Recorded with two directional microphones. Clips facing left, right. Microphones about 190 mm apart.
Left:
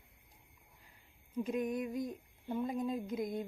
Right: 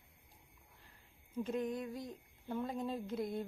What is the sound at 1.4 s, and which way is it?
Speech, 15° left (ahead or behind).